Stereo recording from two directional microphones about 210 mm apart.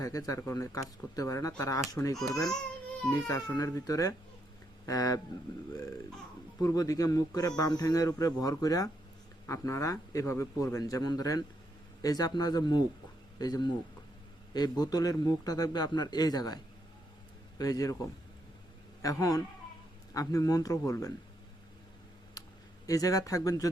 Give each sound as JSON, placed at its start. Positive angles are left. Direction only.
{"t": 0.0, "sound": "a man's voice", "side_deg": 15}
{"t": 2.1, "sound": "speech", "side_deg": 0}
{"t": 3.1, "sound": "a man's voice", "side_deg": 15}
{"t": 6.6, "sound": "a man's voice", "side_deg": 15}
{"t": 17.6, "sound": "a man's voice", "side_deg": 15}
{"t": 22.9, "sound": "a man's voice", "side_deg": 15}